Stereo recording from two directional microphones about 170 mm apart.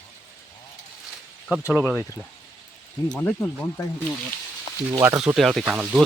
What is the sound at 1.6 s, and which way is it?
Speech, 10° left (ahead or behind).